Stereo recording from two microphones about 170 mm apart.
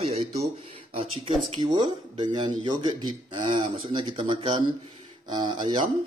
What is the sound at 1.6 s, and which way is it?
A man's voice, 30° right (ahead or behind).